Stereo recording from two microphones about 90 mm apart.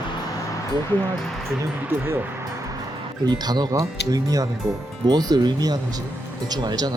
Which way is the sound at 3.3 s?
50° right (ahead or behind).